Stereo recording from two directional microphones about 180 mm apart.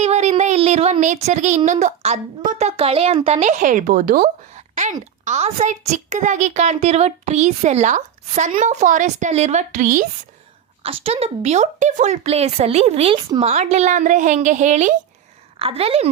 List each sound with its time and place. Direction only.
0.0 s a sound: 40° right (ahead or behind)
5.2 s a woman's voice: 40° right (ahead or behind)
10.8 s a woman's voice: 35° right (ahead or behind)